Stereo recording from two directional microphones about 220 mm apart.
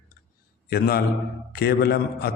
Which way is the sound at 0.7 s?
45° left (ahead or behind).